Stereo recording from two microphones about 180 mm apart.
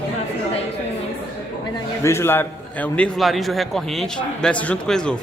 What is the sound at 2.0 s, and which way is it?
A man's voice, 15° left (ahead or behind).